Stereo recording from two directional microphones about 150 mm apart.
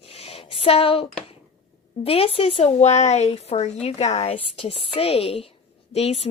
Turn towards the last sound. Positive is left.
turn(degrees=45)  # may be behind; listen again after turning